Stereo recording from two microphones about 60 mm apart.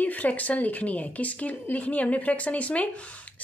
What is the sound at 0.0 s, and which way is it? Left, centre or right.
A woman's voice, left.